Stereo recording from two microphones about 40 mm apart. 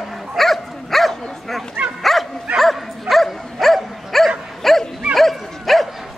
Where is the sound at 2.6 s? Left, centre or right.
Centre.